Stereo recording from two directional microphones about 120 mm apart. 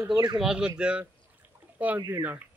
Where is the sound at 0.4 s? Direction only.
5° right (ahead or behind).